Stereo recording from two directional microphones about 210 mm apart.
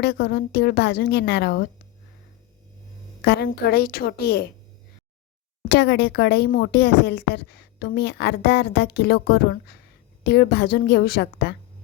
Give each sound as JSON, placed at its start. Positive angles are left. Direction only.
{"t": 0.0, "sound": "speech", "side_deg": 50}
{"t": 3.2, "sound": "speech", "side_deg": 50}
{"t": 5.6, "sound": "speech", "side_deg": 55}